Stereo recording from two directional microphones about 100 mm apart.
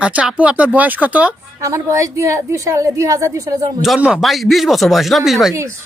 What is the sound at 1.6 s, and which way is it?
A woman's voice, 30° right (ahead or behind).